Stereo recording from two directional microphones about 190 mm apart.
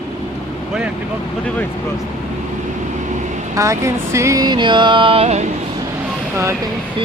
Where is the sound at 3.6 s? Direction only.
15° right (ahead or behind); by 5.5 s 35° right (ahead or behind).